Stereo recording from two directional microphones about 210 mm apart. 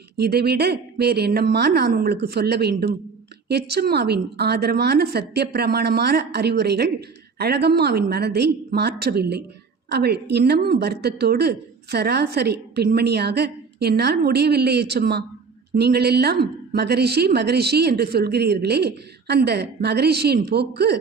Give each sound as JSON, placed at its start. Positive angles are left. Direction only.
{"t": 0.2, "sound": "a woman's voice", "side_deg": -50}